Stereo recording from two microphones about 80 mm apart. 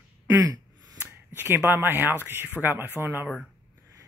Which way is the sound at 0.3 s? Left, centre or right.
Right.